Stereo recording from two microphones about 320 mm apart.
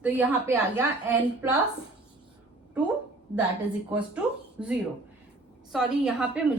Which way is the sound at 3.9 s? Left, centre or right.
Centre.